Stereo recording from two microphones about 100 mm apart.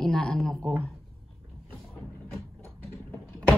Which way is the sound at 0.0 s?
5° left (ahead or behind).